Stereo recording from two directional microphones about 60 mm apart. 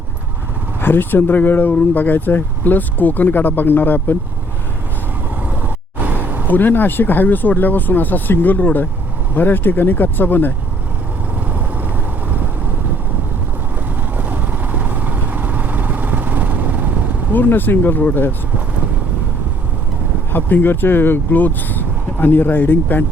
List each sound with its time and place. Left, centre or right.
0.8 s speech: left
5.4 s vehicle: right
6.5 s speech: left
11.4 s vehicle: right
14.2 s vehicle: right
17.3 s speech: left
20.3 s speech: left